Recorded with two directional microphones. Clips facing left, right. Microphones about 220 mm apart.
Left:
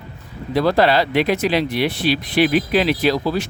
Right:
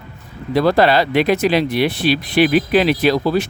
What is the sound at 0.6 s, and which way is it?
Speech, 55° right (ahead or behind).